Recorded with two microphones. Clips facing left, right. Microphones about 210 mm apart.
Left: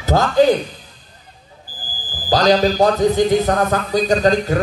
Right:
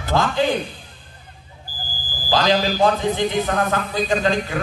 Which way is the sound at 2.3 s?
40° left (ahead or behind).